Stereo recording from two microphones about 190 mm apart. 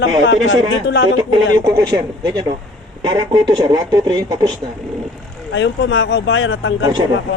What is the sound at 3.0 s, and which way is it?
Speech, 20° right (ahead or behind).